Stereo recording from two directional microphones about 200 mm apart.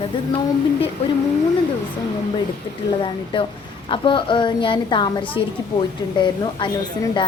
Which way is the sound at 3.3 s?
25° left (ahead or behind).